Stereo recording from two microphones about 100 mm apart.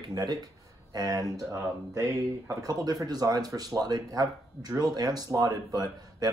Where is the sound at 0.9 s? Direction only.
35° right (ahead or behind).